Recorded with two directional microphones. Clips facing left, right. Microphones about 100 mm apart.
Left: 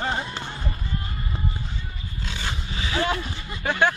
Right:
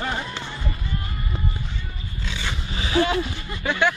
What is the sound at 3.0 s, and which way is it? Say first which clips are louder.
Speech: right 3 dB; 45° left (ahead or behind).